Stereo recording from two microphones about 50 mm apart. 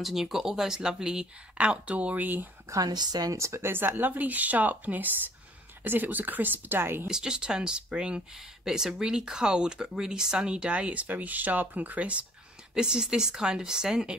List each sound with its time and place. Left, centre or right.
0.0 s speech: centre; by 2.2 s right
3.3 s speech: right
3.7 s a woman's voice: right
7.1 s speech: centre
12.7 s speech: centre